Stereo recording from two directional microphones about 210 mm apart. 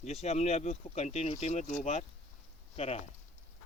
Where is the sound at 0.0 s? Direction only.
30° left (ahead or behind).